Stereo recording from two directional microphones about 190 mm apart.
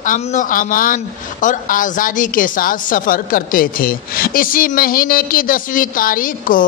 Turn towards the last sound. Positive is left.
turn(degrees=45)  # may be behind; listen again after turning